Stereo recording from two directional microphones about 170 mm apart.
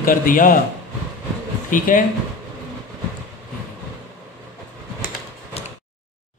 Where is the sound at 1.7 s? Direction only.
55° left (ahead or behind).